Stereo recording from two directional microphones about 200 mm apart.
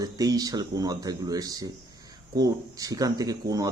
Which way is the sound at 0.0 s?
20° right (ahead or behind).